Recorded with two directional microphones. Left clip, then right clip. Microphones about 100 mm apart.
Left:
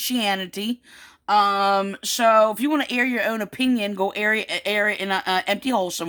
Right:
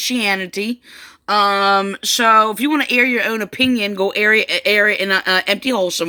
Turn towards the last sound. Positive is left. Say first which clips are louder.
# right 5 dB
turn(degrees=35)  # may be behind; listen again after turning